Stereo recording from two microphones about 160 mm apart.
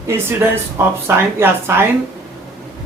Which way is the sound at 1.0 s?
15° right (ahead or behind).